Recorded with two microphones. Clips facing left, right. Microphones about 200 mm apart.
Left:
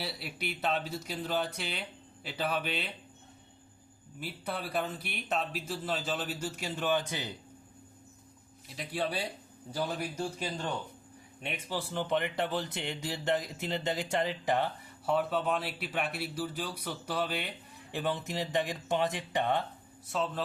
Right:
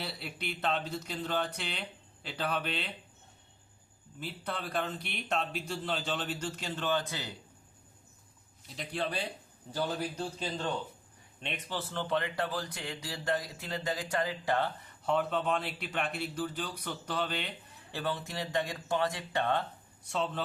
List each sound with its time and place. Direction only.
0.0 s speech: 5° left (ahead or behind)
4.2 s speech: 10° left (ahead or behind)
8.7 s speech: 5° left (ahead or behind)
15.0 s speech: 5° left (ahead or behind)
20.1 s a man's voice: centre (ahead or behind)